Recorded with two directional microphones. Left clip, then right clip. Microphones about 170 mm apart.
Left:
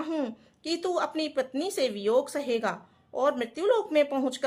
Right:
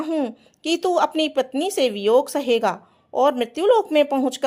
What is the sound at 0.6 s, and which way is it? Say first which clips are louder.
Speech: right 9 dB; 35° right (ahead or behind).